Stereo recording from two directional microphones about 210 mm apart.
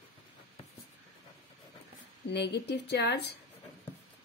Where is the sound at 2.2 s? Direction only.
55° left (ahead or behind).